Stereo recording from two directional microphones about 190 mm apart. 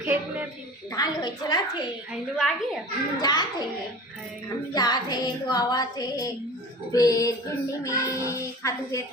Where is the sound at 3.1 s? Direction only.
20° left (ahead or behind).